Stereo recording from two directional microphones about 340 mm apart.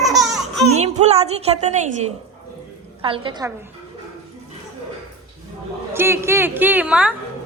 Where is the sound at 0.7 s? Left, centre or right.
Centre.